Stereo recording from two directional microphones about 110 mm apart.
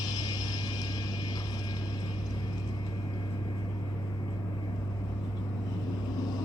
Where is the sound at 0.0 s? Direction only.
40° left (ahead or behind).